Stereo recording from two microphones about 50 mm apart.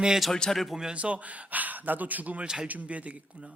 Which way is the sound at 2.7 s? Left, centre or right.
Right.